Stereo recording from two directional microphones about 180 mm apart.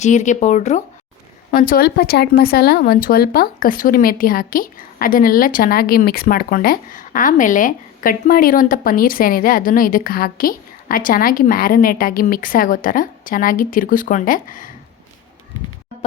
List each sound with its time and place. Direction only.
0.0 s speech: 40° left (ahead or behind)